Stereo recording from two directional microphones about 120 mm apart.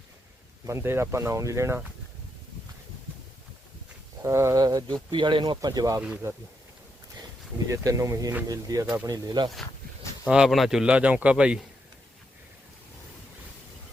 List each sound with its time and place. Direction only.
0.6 s speech: 20° right (ahead or behind)
4.2 s speech: 25° right (ahead or behind); by 5.5 s 40° right (ahead or behind)
5.5 s speech: 30° right (ahead or behind)
7.7 s speech: 25° right (ahead or behind)
10.2 s a man's voice: 5° right (ahead or behind)